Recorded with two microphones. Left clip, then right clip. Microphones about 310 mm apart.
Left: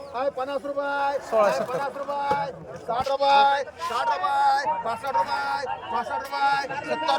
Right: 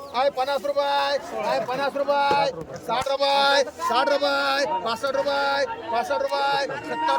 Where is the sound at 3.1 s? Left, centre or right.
Right.